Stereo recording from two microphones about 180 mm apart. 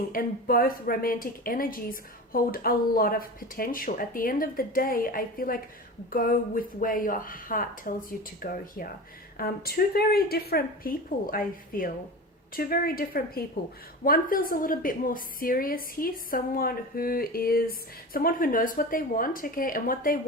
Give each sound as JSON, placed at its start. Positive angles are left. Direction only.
{"t": 0.1, "sound": "a woman's voice", "side_deg": 50}